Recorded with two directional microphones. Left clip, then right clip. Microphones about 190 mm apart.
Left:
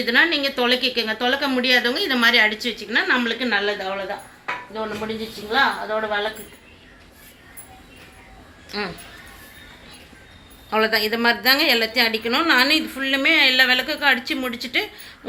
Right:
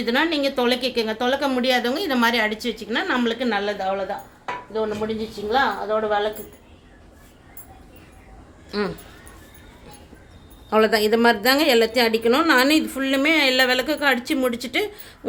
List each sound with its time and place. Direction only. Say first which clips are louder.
0.0 s a woman's voice: left 3 dB; 70° right (ahead or behind)
5.5 s a woman's voice: left 1 dB; 55° right (ahead or behind)
8.7 s a woman's voice: right 2 dB; 70° right (ahead or behind)
10.7 s a woman's voice: right 2 dB; 75° right (ahead or behind)